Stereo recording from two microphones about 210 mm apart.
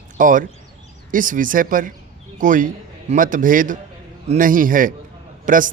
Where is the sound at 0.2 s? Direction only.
40° right (ahead or behind).